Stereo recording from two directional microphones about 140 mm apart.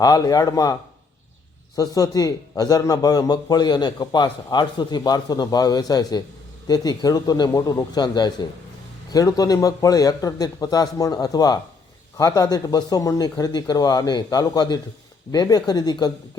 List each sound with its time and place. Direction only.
0.0 s a man's voice: 25° left (ahead or behind)